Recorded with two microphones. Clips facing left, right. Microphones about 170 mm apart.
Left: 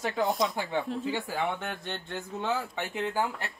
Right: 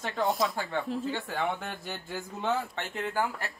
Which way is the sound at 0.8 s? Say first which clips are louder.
Left 1 dB; centre (ahead or behind).